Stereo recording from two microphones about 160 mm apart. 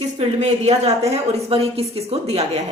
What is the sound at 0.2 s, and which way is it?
A woman's voice, 40° right (ahead or behind).